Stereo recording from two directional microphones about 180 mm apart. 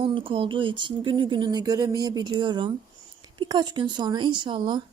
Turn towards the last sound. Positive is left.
turn(degrees=-25)  # may be behind; listen again after turning